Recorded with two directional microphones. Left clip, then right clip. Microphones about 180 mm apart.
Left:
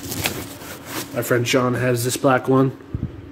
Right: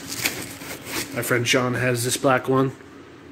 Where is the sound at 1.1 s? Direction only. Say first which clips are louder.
Left 2 dB; 10° left (ahead or behind).